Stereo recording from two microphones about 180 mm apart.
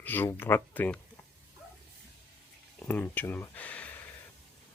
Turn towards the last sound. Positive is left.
turn(degrees=10)  # may be behind; listen again after turning